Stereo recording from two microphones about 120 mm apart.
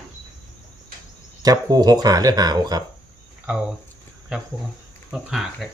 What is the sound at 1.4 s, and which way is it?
Speech, 30° right (ahead or behind).